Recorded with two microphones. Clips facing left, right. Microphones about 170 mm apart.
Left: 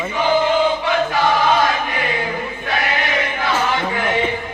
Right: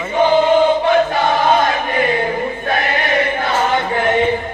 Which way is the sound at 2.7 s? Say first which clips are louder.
Right 2 dB; 50° right (ahead or behind).